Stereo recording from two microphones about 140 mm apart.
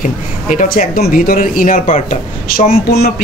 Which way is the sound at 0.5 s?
75° left (ahead or behind).